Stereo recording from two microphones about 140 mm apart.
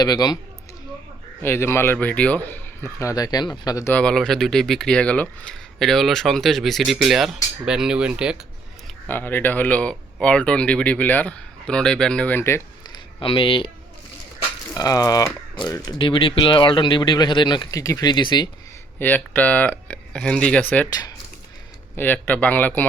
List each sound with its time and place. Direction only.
0.0 s speech: 30° left (ahead or behind)
1.4 s speech: 15° left (ahead or behind)
3.9 s speech: 5° left (ahead or behind)
7.6 s cutlery: 5° right (ahead or behind)
9.0 s speech: 15° left (ahead or behind)
12.9 s a sound: 35° left (ahead or behind)
14.7 s speech: 25° left (ahead or behind)
18.9 s speech: 10° left (ahead or behind)
20.9 s speech: 25° left (ahead or behind)
21.9 s speech: 10° left (ahead or behind)